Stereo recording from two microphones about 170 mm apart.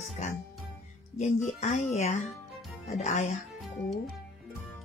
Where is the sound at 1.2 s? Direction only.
45° left (ahead or behind).